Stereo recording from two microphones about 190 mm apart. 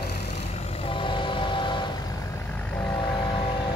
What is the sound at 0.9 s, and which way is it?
Train, 25° left (ahead or behind).